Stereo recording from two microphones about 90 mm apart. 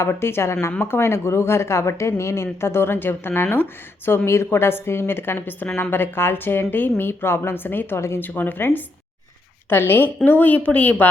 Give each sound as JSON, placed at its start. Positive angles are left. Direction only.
{"t": 0.0, "sound": "a woman's voice", "side_deg": 30}